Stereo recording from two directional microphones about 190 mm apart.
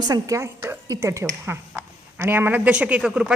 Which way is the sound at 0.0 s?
20° right (ahead or behind).